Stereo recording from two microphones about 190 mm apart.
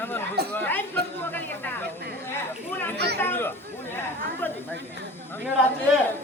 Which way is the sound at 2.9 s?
60° right (ahead or behind).